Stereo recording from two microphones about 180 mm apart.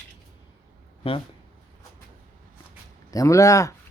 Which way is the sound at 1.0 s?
30° left (ahead or behind).